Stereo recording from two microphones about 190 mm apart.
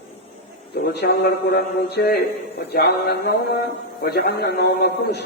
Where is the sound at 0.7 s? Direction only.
60° left (ahead or behind).